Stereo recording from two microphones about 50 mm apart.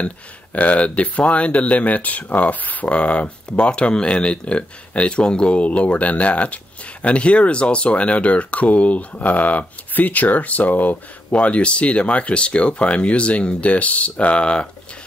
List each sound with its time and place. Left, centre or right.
0.6 s speech: left
11.3 s speech: left